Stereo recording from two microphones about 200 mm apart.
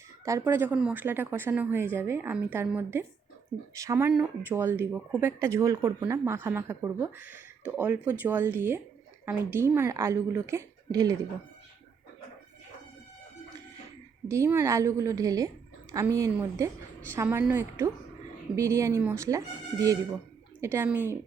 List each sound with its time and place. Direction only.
0.3 s speech: 15° right (ahead or behind)
14.3 s speech: 15° right (ahead or behind)